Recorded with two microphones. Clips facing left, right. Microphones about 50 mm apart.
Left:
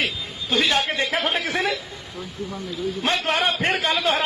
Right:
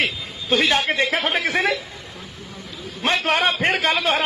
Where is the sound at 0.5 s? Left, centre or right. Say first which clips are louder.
Right 2 dB; right.